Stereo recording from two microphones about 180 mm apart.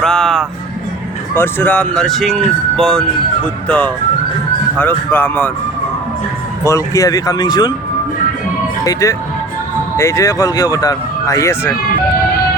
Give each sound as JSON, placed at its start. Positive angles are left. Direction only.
{"t": 0.0, "sound": "music", "side_deg": 5}
{"t": 1.3, "sound": "speech", "side_deg": 10}
{"t": 6.7, "sound": "speech", "side_deg": 15}
{"t": 8.8, "sound": "speech", "side_deg": 20}